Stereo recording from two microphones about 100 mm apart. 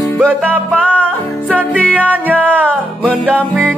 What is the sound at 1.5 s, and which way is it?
Music, 15° right (ahead or behind).